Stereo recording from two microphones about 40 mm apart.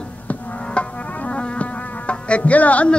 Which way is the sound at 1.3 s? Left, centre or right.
Left.